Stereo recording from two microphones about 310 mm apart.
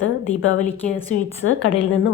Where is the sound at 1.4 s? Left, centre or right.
Left.